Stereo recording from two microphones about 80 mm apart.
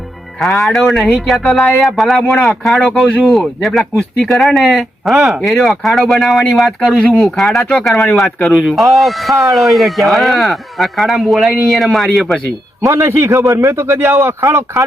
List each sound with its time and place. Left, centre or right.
0.3 s speech: centre
12.8 s a man's voice: right